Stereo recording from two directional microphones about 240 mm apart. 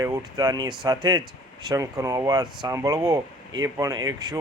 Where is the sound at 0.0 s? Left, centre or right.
Centre.